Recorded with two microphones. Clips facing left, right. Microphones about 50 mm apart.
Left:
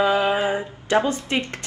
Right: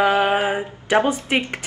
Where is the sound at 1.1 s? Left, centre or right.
Right.